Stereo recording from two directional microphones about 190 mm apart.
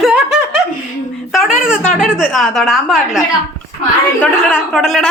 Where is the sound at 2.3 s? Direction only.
Centre (ahead or behind).